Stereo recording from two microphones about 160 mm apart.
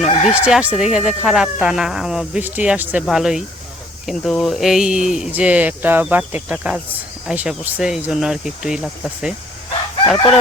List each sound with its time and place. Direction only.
0.0 s fowl: 45° left (ahead or behind)
0.4 s speech: 5° right (ahead or behind)